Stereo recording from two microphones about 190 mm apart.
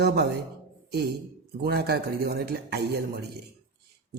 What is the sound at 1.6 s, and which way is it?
A woman's voice, 55° right (ahead or behind).